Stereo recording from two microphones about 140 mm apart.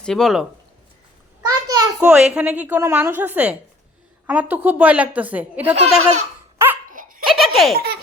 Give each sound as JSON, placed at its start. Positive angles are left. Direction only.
{"t": 0.0, "sound": "speech", "side_deg": 5}
{"t": 1.4, "sound": "a sound", "side_deg": -25}
{"t": 2.0, "sound": "a woman's voice", "side_deg": -5}
{"t": 5.7, "sound": "laughter", "side_deg": -50}
{"t": 6.9, "sound": "laughter", "side_deg": -80}
{"t": 7.3, "sound": "baby laughter", "side_deg": 0}